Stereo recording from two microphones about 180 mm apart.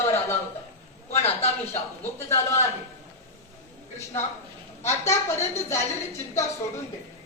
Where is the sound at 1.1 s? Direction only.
35° left (ahead or behind).